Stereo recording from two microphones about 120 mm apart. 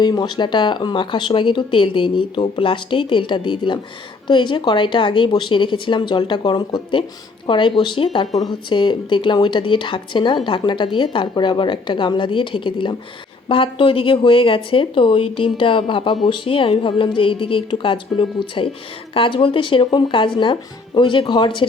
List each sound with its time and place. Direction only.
0.0 s speech: 35° left (ahead or behind)